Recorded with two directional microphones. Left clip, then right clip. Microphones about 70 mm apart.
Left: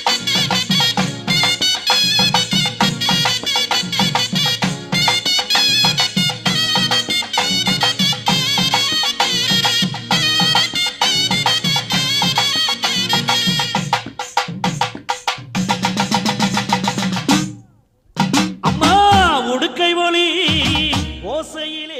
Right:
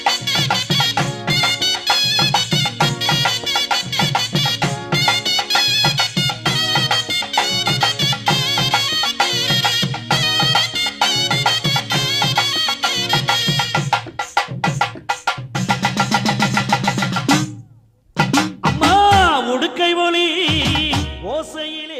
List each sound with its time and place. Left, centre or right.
0.1 s music: right
15.5 s music: right